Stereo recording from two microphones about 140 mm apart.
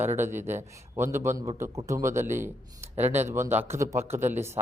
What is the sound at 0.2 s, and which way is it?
A man's voice, 15° right (ahead or behind).